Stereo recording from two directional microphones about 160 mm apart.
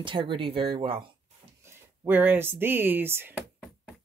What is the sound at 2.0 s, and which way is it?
Speech, 10° right (ahead or behind).